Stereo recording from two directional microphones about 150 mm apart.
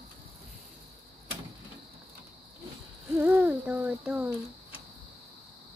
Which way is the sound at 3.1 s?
10° right (ahead or behind).